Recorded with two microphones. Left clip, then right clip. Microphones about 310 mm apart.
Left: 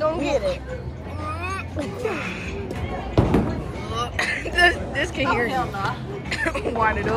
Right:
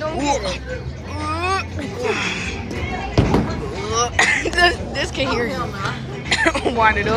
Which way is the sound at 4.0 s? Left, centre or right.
Centre.